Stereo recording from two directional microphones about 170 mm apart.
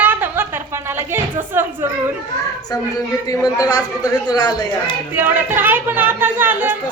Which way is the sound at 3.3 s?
20° left (ahead or behind).